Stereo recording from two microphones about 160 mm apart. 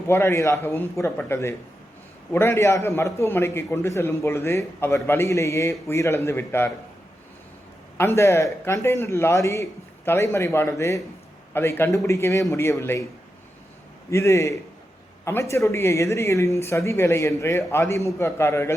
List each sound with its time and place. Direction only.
0.1 s speech: 15° left (ahead or behind)
7.9 s speech: 15° left (ahead or behind)
14.1 s speech: 20° left (ahead or behind)